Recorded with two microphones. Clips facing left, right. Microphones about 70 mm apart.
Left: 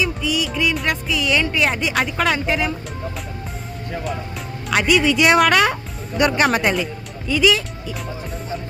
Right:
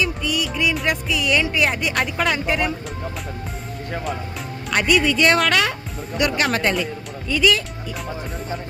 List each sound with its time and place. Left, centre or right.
0.0 s music: centre
4.7 s speech: centre
5.2 s a woman's voice: centre
6.5 s speech: centre
7.3 s speech: centre